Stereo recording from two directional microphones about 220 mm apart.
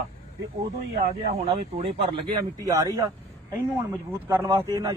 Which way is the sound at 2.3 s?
15° right (ahead or behind).